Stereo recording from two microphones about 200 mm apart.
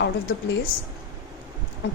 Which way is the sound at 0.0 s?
50° left (ahead or behind).